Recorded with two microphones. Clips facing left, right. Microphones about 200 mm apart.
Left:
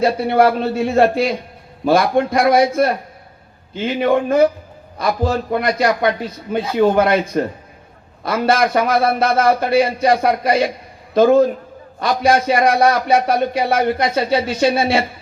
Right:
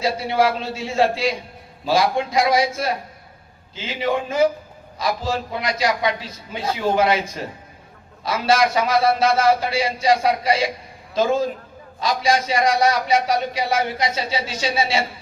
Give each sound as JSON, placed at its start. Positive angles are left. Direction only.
{"t": 0.0, "sound": "a man's voice", "side_deg": 60}